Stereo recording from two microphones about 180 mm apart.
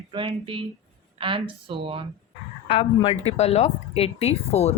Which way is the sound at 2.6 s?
30° left (ahead or behind).